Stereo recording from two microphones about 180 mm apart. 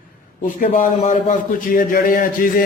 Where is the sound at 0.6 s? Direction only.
50° left (ahead or behind).